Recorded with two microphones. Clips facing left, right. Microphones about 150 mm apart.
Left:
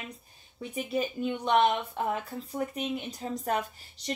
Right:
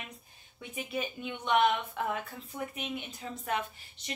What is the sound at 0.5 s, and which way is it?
Speech, 40° left (ahead or behind).